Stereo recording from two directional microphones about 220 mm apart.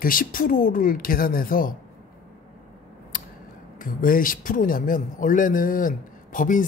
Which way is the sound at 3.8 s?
40° left (ahead or behind).